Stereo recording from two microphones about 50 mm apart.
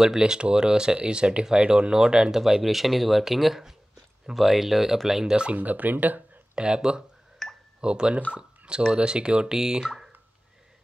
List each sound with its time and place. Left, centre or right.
0.0 s speech: centre
5.2 s speech: centre
5.5 s speech: right
6.5 s speech: centre
7.4 s a sound: centre
7.8 s speech: centre